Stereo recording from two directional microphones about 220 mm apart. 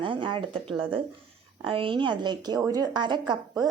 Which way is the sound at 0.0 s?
20° right (ahead or behind).